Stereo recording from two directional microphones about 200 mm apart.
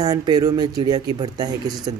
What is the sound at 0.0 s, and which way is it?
Speech, 20° right (ahead or behind).